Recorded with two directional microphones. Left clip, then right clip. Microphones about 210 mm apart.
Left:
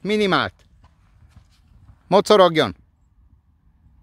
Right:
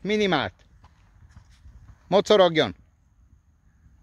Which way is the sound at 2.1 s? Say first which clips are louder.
Left 4 dB; 30° left (ahead or behind).